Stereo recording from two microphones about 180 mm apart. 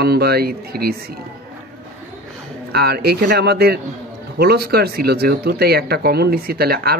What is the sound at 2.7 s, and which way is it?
Speech, 60° right (ahead or behind).